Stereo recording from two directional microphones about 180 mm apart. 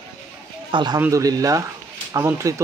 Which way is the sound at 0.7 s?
25° right (ahead or behind).